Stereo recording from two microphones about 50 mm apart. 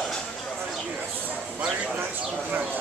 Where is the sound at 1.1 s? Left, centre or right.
Right.